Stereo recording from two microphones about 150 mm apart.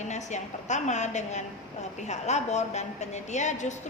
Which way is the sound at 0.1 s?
50° left (ahead or behind).